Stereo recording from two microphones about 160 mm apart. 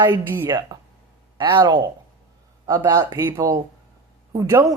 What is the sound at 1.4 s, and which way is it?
Speech, 30° right (ahead or behind).